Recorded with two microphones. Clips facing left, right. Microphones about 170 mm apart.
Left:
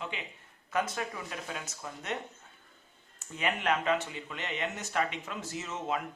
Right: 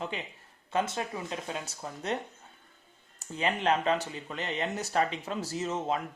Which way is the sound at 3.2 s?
30° right (ahead or behind).